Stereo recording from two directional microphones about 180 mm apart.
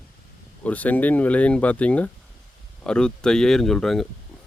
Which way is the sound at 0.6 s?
10° left (ahead or behind).